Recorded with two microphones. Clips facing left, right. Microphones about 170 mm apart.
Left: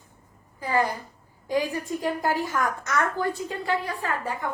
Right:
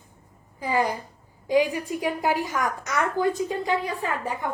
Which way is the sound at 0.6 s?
15° right (ahead or behind).